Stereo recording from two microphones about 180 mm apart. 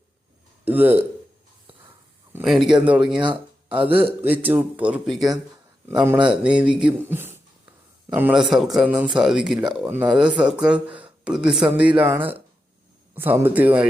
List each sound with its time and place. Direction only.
0.6 s speech: 10° right (ahead or behind)
2.3 s a man's voice: centre (ahead or behind)
3.8 s a man's voice: 30° right (ahead or behind)
4.2 s a man's voice: 10° right (ahead or behind)